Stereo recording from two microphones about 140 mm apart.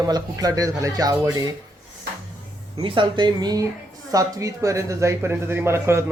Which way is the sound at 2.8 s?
35° right (ahead or behind).